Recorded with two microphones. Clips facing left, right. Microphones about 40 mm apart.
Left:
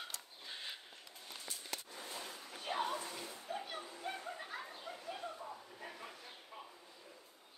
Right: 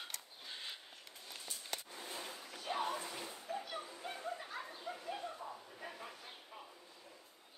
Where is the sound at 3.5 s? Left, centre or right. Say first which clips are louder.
Right 1 dB; left.